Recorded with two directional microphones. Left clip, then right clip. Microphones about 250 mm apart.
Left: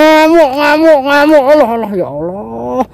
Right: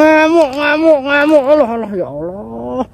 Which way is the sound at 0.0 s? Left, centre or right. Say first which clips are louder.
Left 3 dB; centre.